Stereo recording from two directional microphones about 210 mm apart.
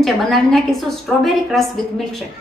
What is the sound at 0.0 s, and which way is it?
A woman's voice, centre (ahead or behind).